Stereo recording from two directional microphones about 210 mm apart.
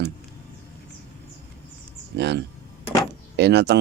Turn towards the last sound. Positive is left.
turn(degrees=-50)  # may be behind; listen again after turning